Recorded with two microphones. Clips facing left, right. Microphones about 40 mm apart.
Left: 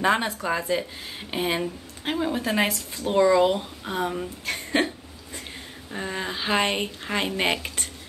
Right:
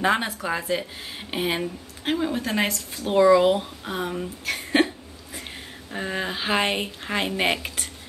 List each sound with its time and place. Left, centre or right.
0.0 s a woman's voice: centre
3.0 s speech: centre